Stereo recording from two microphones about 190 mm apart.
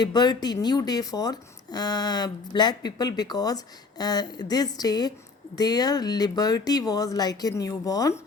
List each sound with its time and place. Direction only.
0.0 s speech: 20° left (ahead or behind)